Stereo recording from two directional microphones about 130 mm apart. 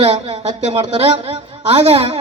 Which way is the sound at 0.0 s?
55° right (ahead or behind).